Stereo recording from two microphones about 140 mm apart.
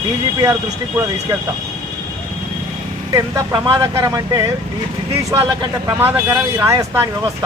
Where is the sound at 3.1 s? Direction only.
25° right (ahead or behind).